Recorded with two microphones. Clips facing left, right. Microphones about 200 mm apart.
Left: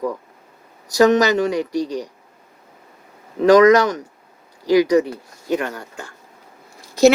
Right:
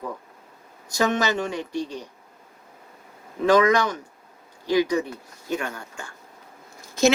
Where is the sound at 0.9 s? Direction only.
40° left (ahead or behind).